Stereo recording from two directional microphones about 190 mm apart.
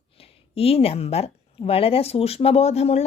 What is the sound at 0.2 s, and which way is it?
Speech, 30° left (ahead or behind).